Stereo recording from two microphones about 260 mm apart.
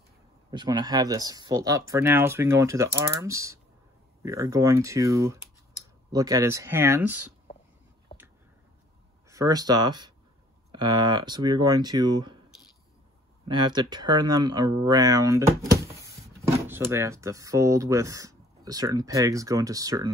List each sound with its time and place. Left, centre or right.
0.5 s speech: centre
9.3 s speech: centre
13.5 s speech: centre